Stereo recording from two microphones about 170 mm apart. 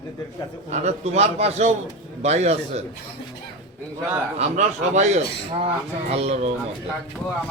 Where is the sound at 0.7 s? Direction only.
40° right (ahead or behind).